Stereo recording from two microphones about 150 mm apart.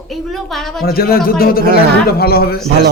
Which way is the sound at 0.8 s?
90° left.